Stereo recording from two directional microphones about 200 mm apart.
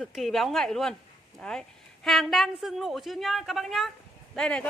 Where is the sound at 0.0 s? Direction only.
Centre (ahead or behind).